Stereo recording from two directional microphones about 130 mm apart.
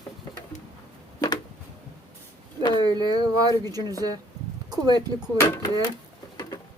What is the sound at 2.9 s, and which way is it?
Speech, 30° right (ahead or behind).